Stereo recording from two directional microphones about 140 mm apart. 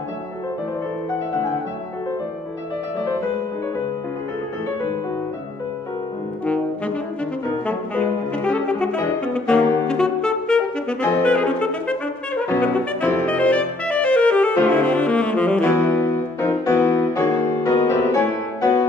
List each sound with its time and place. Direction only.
7.6 s brass instrument: 10° left (ahead or behind)
15.7 s music: 20° left (ahead or behind)